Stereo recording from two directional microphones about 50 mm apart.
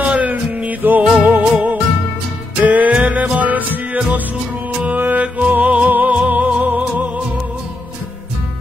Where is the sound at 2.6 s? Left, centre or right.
Right.